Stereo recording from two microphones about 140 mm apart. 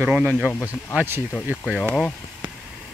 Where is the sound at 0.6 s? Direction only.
15° right (ahead or behind).